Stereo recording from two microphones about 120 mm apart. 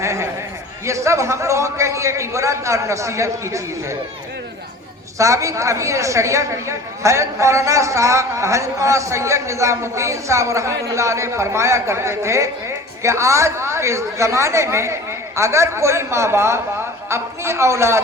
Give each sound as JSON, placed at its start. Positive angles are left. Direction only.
{"t": 0.0, "sound": "a sound", "side_deg": -25}
{"t": 0.9, "sound": "a woman's voice", "side_deg": -25}
{"t": 5.1, "sound": "a woman's voice", "side_deg": -25}